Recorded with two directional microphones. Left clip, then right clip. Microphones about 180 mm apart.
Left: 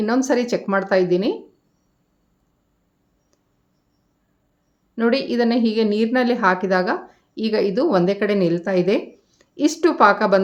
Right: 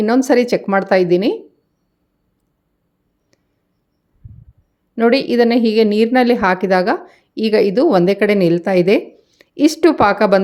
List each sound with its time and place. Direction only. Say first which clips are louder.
0.0 s a woman's voice: right 6 dB; 40° right (ahead or behind)
4.9 s a woman's voice: right 6 dB; 40° right (ahead or behind)